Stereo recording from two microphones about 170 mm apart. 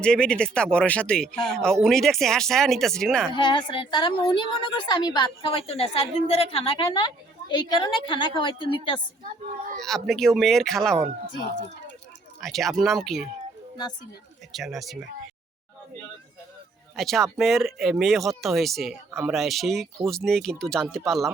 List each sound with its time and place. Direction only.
0.0 s speech: 5° left (ahead or behind)
3.3 s a woman's voice: 30° left (ahead or behind)
9.8 s speech: centre (ahead or behind)
12.4 s speech: centre (ahead or behind)
14.5 s speech: centre (ahead or behind)
17.0 s speech: centre (ahead or behind)